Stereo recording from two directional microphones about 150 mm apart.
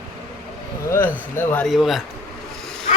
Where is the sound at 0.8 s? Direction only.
15° left (ahead or behind).